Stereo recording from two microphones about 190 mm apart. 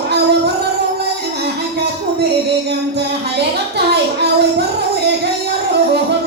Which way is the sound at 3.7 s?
60° right (ahead or behind).